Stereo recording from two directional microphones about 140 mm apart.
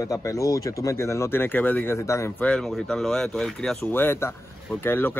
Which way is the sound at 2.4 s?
5° left (ahead or behind).